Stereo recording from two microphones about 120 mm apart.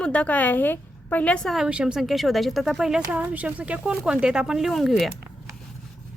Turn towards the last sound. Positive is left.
turn(degrees=0)  # may be behind; listen again after turning